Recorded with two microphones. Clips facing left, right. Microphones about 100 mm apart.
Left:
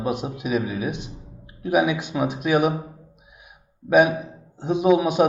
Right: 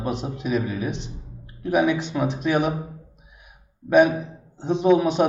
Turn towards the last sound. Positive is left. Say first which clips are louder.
# even
turn(degrees=10)  # may be behind; listen again after turning